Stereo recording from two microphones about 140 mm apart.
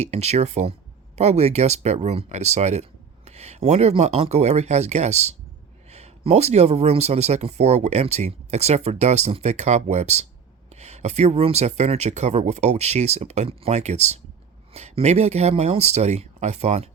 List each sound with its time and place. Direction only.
0.0 s speech: 50° right (ahead or behind)